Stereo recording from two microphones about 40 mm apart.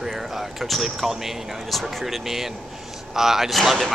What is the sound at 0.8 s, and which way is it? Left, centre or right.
Speech, centre.